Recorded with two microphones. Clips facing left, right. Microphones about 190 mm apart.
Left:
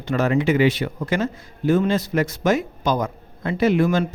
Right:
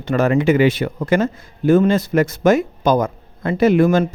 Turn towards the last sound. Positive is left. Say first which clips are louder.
# right 5 dB
turn(degrees=-50)  # may be behind; listen again after turning